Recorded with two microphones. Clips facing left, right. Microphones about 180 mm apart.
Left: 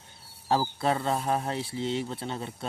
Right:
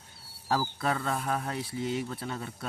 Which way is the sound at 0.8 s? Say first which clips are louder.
Left 3 dB; 25° left (ahead or behind).